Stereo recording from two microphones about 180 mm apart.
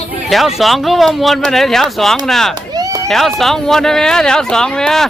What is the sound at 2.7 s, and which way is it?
Run, 20° right (ahead or behind).